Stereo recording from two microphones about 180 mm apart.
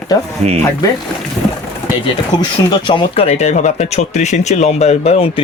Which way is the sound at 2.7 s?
25° left (ahead or behind).